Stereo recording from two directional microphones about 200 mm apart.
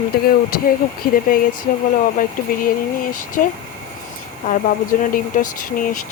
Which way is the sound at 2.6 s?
45° left (ahead or behind).